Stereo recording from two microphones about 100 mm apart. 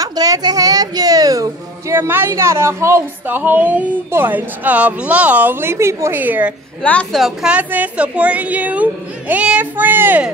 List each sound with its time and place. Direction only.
0.0 s a woman's voice: 40° right (ahead or behind); by 6.5 s 20° right (ahead or behind)
6.8 s a woman's voice: 10° left (ahead or behind)
7.2 s a woman's voice: centre (ahead or behind)
7.5 s speech: 15° right (ahead or behind)